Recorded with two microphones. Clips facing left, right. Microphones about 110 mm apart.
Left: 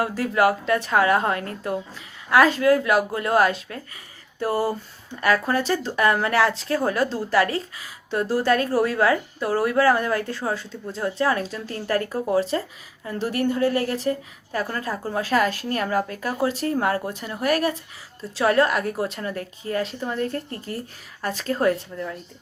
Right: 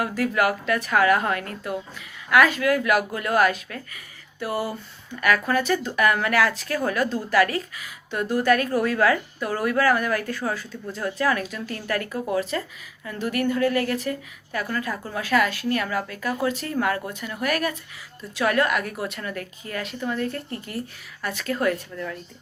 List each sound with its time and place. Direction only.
0.0 s a woman's voice: 30° left (ahead or behind)